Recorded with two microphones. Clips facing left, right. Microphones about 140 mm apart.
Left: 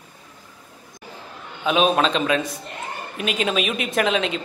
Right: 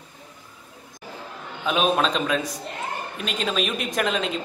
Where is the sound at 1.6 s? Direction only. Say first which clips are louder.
Left 3 dB; centre (ahead or behind).